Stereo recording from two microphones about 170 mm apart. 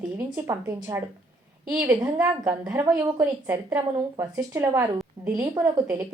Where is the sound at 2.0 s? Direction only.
20° right (ahead or behind).